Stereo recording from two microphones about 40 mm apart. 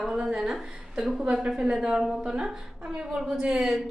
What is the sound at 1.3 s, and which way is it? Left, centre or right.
A woman's voice, centre.